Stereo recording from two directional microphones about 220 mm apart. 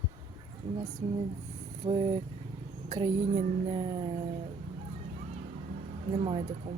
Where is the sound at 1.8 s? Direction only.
25° right (ahead or behind).